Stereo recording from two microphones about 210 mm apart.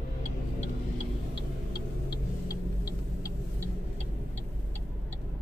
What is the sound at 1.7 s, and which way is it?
Vehicle, 20° left (ahead or behind).